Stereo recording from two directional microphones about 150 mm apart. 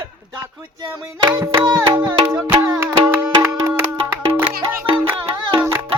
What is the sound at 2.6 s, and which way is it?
Music, 25° right (ahead or behind).